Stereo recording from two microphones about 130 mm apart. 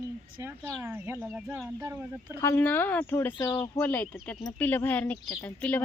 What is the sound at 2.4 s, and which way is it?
Speech, 20° left (ahead or behind).